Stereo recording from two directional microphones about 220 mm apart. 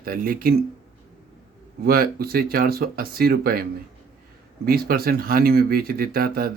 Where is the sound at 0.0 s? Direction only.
40° right (ahead or behind).